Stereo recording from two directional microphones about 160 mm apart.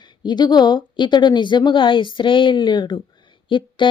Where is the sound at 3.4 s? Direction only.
30° left (ahead or behind).